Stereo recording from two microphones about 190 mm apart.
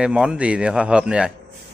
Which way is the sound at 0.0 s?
5° right (ahead or behind).